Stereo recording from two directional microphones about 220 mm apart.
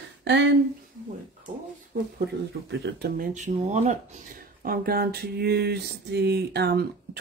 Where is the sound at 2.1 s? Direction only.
50° right (ahead or behind).